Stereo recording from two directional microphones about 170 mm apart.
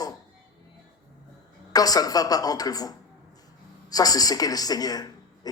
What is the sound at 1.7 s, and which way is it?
Speech, 20° left (ahead or behind).